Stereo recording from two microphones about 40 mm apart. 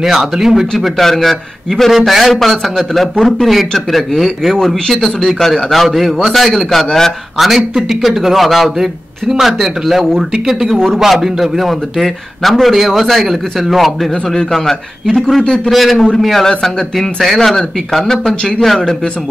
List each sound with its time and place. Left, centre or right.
0.0 s speech: centre
0.7 s a man's voice: centre
7.3 s a man's voice: centre
15.4 s a man's voice: centre
15.7 s a man's voice: centre